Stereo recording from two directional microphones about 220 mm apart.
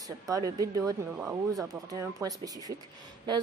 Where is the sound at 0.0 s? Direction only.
15° right (ahead or behind).